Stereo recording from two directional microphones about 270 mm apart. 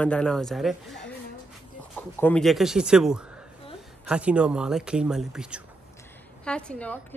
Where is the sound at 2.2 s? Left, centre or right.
Centre.